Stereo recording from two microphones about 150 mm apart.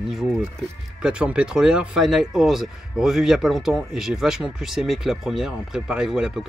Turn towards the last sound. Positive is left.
turn(degrees=-5)  # may be behind; listen again after turning